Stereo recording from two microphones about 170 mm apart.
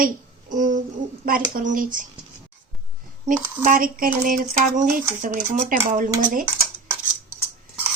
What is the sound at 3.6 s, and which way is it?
Speech, 55° right (ahead or behind).